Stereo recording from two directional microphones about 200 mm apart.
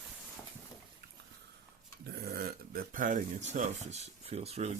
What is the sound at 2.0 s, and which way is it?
Speech, 50° right (ahead or behind).